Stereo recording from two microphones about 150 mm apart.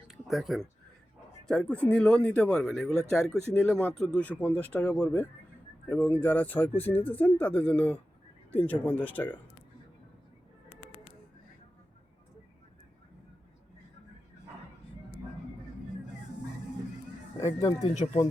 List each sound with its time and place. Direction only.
0.1 s a sound: centre (ahead or behind)
1.5 s speech: 5° left (ahead or behind)
17.6 s speech: 20° left (ahead or behind)
17.9 s speech: 50° left (ahead or behind)